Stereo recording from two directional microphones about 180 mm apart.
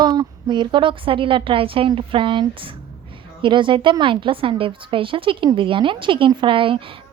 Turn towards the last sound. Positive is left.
turn(degrees=-30)  # may be behind; listen again after turning